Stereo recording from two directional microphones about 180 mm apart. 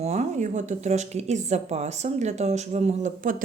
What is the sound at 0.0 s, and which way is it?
A woman's voice, 40° right (ahead or behind).